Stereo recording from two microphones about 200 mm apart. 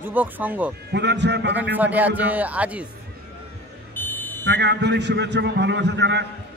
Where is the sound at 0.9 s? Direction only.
60° right (ahead or behind).